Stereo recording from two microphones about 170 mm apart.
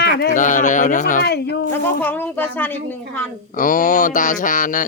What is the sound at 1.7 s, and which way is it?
Speech, 10° left (ahead or behind).